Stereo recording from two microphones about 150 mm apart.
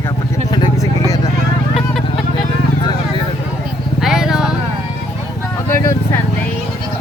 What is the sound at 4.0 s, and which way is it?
Vehicle, 5° right (ahead or behind).